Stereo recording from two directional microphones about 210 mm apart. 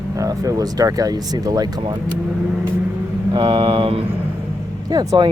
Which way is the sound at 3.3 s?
20° right (ahead or behind).